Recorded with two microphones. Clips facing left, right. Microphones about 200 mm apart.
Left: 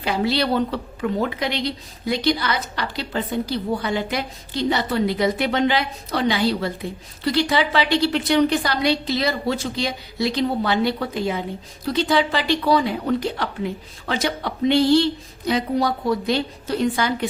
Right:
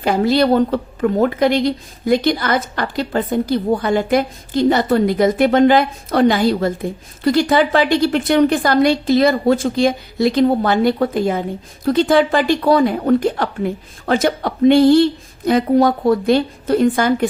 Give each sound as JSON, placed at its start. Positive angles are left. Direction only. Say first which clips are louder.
{"t": 0.0, "sound": "a woman's voice", "louder": "right 7 dB", "side_deg": -45}